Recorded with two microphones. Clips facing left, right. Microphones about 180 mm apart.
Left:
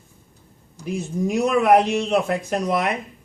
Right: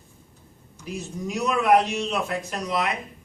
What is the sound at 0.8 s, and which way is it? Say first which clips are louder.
A man's voice: left 7 dB; 50° left (ahead or behind).